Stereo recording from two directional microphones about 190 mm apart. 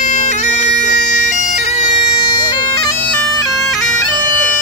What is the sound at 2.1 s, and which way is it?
Bagpipes, 25° left (ahead or behind).